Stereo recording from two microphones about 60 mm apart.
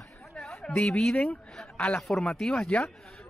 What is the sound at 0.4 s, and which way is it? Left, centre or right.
A woman's voice, centre.